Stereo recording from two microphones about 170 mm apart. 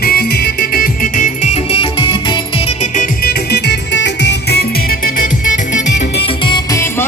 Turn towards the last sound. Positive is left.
turn(degrees=20)  # may be behind; listen again after turning